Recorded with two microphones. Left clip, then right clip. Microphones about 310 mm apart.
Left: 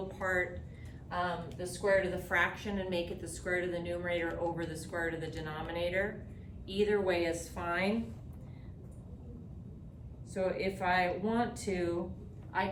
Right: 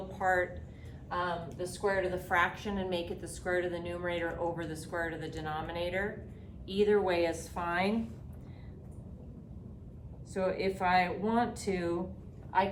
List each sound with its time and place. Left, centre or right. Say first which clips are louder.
0.1 s a sound: right 4 dB; centre
1.1 s a woman's voice: right 1 dB; centre
10.3 s a woman's voice: right 2 dB; centre